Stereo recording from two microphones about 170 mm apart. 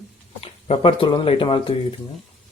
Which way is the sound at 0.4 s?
35° left (ahead or behind).